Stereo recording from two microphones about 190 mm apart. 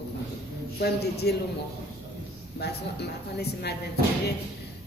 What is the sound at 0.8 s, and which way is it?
Speech, 60° left (ahead or behind).